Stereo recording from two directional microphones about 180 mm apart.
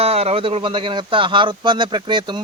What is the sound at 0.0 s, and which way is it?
Speech, 35° right (ahead or behind).